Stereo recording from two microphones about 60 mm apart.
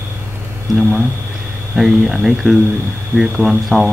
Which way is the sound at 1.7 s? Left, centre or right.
Centre.